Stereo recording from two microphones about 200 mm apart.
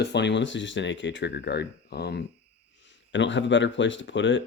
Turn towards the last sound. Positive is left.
turn(degrees=65)  # may be behind; listen again after turning